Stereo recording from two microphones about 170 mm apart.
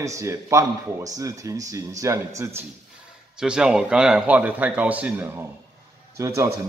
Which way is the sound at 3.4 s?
5° right (ahead or behind).